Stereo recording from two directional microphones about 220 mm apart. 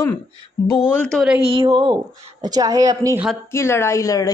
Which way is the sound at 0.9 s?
Centre (ahead or behind).